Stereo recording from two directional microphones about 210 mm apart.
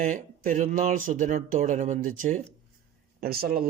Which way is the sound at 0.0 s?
40° right (ahead or behind).